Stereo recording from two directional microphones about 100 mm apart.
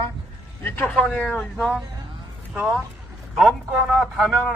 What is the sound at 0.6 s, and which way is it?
Speech, 20° left (ahead or behind).